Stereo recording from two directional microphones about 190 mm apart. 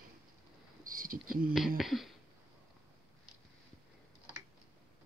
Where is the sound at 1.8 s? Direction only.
Centre (ahead or behind).